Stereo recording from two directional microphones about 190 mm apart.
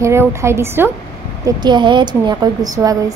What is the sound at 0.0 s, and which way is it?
A woman's voice, 15° right (ahead or behind).